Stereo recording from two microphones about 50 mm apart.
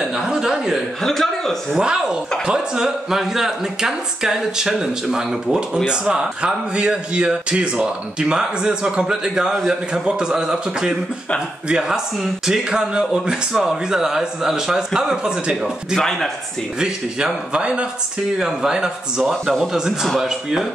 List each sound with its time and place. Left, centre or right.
0.3 s chuckle: centre
1.0 s a man's voice: centre
1.8 s a man's voice: centre
16.0 s a man's voice: centre
16.8 s speech: centre
18.4 s a man's voice: centre